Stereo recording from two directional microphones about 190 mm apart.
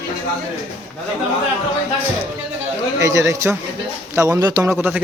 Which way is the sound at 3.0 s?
15° right (ahead or behind).